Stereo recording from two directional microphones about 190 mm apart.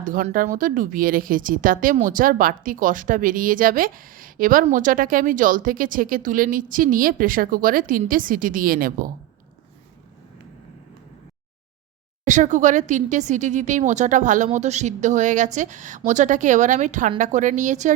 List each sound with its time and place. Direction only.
0.0 s a woman's voice: 45° right (ahead or behind)
12.2 s speech: 40° right (ahead or behind)